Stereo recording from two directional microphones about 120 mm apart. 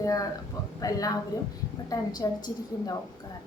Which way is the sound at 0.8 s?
30° left (ahead or behind).